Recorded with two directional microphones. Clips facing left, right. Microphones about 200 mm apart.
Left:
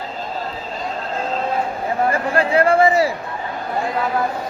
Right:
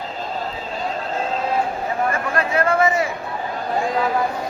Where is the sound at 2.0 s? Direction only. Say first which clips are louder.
Left 4 dB; 30° left (ahead or behind).